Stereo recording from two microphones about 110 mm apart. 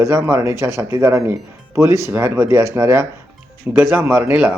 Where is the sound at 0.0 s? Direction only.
25° right (ahead or behind).